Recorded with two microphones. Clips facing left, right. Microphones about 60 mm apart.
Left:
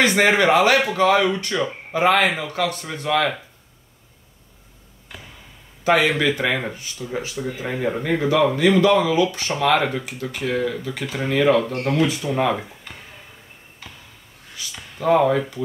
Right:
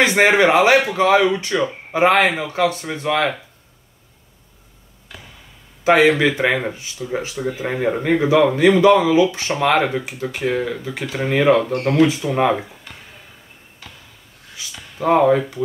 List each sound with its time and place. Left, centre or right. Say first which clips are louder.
0.0 s speech: right 3 dB; right
5.9 s speech: right 4 dB; right
15.0 s speech: right 2 dB; right